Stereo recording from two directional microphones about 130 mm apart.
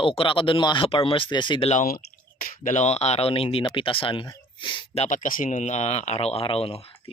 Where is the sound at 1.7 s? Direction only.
70° left (ahead or behind).